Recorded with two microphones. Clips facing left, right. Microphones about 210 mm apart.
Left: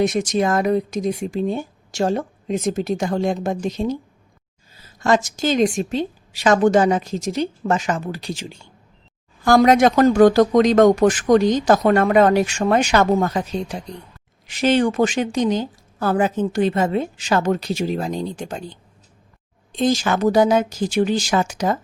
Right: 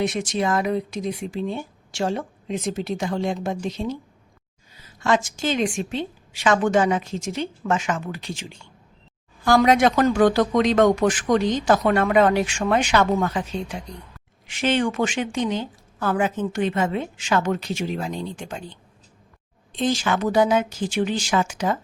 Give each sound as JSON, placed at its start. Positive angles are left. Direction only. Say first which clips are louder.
{"t": 0.0, "sound": "speech", "louder": "left 5 dB", "side_deg": 45}